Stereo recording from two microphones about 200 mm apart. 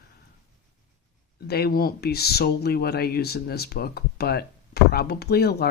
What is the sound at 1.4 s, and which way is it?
Speech, 50° left (ahead or behind).